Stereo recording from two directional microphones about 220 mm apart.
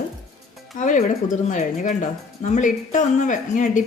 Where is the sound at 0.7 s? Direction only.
35° left (ahead or behind).